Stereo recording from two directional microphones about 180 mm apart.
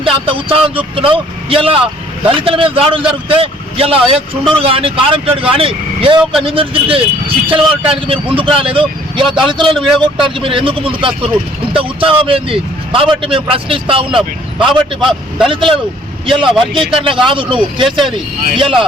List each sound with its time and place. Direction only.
0.0 s speech: 30° right (ahead or behind)
17.8 s speech: centre (ahead or behind)
18.5 s speech: 30° right (ahead or behind)